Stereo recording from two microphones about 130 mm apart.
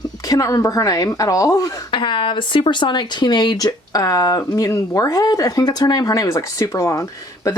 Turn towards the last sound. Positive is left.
turn(degrees=25)  # may be behind; listen again after turning